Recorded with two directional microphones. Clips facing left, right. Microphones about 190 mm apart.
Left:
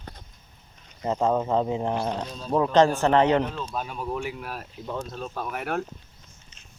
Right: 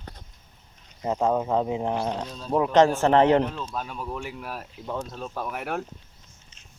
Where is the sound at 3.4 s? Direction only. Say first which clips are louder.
Even; centre (ahead or behind).